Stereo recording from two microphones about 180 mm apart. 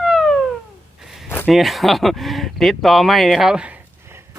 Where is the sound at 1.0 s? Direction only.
Centre (ahead or behind).